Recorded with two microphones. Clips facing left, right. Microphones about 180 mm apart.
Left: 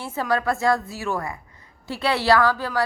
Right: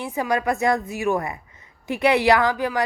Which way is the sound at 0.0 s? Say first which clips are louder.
Right 1 dB; 15° right (ahead or behind).